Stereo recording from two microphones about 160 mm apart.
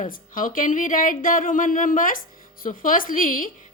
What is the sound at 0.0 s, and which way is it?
Speech, 60° left (ahead or behind).